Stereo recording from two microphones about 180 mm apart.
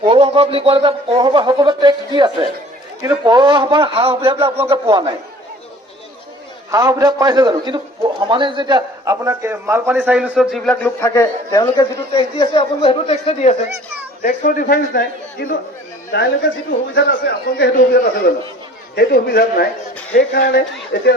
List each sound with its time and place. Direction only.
0.1 s a sound: 30° right (ahead or behind)
3.0 s a man's voice: 25° right (ahead or behind)
6.7 s a man's voice: 20° right (ahead or behind); by 10.8 s centre (ahead or behind)
10.8 s a man's voice: 15° left (ahead or behind); by 13.6 s 35° left (ahead or behind)
14.2 s a man's voice: 50° left (ahead or behind)
16.1 s a man's voice: 70° left (ahead or behind)